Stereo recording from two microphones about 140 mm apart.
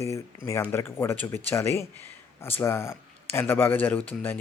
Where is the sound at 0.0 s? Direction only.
20° left (ahead or behind).